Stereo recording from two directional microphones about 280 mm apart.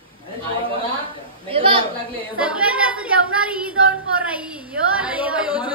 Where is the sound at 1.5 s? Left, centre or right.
Centre.